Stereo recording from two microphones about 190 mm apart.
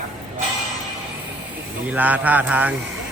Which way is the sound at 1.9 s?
10° right (ahead or behind).